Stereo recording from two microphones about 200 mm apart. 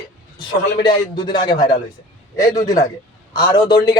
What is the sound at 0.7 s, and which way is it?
A man's voice, 20° left (ahead or behind).